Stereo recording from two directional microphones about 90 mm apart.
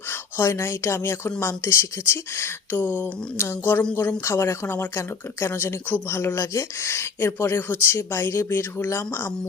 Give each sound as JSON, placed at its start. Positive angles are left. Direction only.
{"t": 0.1, "sound": "speech", "side_deg": 30}